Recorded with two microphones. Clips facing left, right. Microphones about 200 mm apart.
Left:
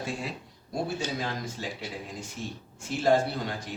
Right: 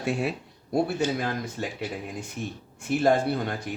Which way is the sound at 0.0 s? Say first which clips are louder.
Right 7 dB; 65° right (ahead or behind).